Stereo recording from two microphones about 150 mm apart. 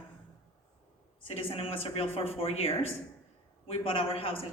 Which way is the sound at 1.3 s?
40° left (ahead or behind).